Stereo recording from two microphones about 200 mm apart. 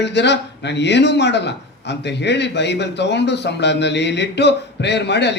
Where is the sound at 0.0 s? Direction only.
60° left (ahead or behind).